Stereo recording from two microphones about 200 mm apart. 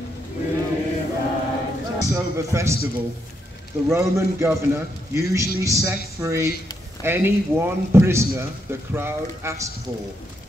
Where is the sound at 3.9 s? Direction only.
15° right (ahead or behind).